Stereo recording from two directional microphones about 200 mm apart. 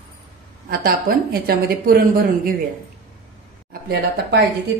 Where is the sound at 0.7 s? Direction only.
50° right (ahead or behind).